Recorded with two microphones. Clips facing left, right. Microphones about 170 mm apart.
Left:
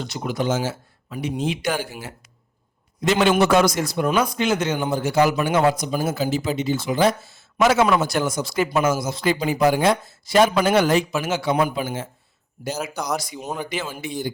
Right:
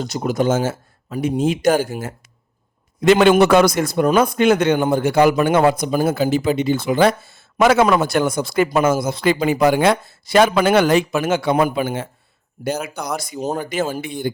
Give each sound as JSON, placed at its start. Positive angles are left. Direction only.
{"t": 0.0, "sound": "speech", "side_deg": -40}
{"t": 3.0, "sound": "a man's voice", "side_deg": -60}
{"t": 13.1, "sound": "speech", "side_deg": -50}